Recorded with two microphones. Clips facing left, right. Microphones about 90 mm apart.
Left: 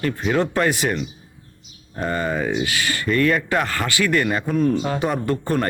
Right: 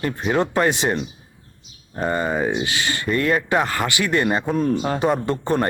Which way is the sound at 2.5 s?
25° right (ahead or behind).